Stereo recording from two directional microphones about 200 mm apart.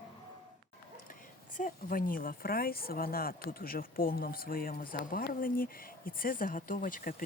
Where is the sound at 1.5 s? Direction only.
40° left (ahead or behind).